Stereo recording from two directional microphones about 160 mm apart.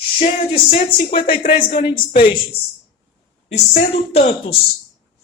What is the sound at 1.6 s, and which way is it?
Speech, 30° left (ahead or behind).